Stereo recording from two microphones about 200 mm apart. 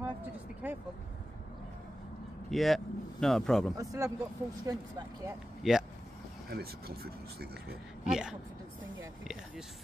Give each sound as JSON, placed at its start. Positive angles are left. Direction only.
{"t": 0.0, "sound": "vehicle", "side_deg": -10}
{"t": 2.5, "sound": "speech", "side_deg": 0}
{"t": 3.7, "sound": "speech", "side_deg": -15}
{"t": 5.6, "sound": "speech", "side_deg": 0}
{"t": 6.5, "sound": "speech", "side_deg": -50}
{"t": 8.0, "sound": "speech", "side_deg": -5}